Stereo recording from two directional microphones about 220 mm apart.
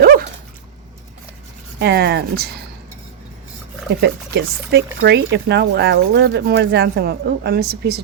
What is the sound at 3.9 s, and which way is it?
Speech, 50° right (ahead or behind).